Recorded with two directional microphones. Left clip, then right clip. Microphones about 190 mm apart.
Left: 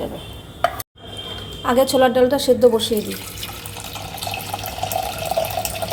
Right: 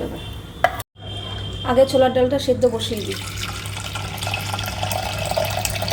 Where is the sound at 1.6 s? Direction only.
30° left (ahead or behind).